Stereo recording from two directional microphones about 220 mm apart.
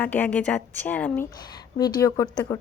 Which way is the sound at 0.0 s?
10° left (ahead or behind).